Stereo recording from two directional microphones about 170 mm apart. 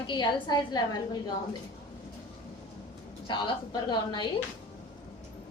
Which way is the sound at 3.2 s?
25° left (ahead or behind).